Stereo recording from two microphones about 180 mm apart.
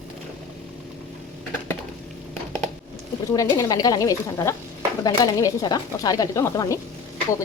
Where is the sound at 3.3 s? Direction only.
20° left (ahead or behind).